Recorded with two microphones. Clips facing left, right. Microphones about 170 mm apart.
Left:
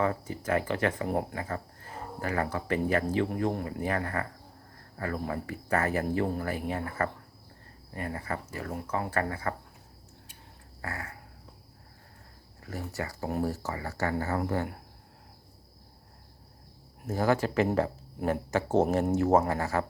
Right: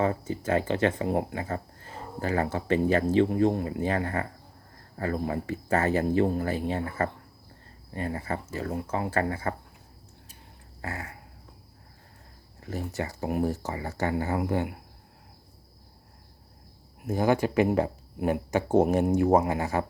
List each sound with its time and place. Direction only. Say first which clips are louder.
0.0 s speech: right 2 dB; 25° right (ahead or behind)
10.8 s a sound: right 2 dB; 25° right (ahead or behind)
12.6 s speech: right 3 dB; 25° right (ahead or behind)
17.1 s speech: right 2 dB; 15° right (ahead or behind)